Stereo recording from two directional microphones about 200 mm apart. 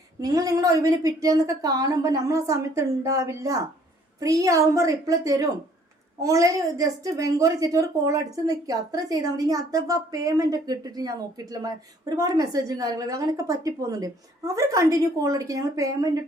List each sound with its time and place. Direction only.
0.2 s a woman's voice: 15° right (ahead or behind)